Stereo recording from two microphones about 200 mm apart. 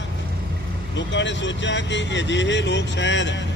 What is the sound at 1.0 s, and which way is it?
Speech, 65° left (ahead or behind).